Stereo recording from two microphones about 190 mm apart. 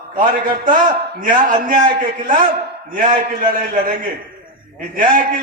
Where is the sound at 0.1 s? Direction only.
45° right (ahead or behind).